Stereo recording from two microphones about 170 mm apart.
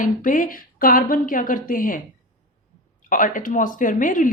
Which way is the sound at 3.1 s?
50° left (ahead or behind).